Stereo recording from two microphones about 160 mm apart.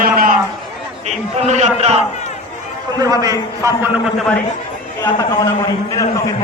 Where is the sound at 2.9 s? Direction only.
20° right (ahead or behind).